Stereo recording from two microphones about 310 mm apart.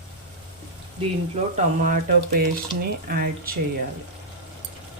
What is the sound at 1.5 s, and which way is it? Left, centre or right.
Speech, right.